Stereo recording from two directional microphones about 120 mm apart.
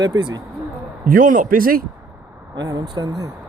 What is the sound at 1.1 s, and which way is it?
Speech, 90° right.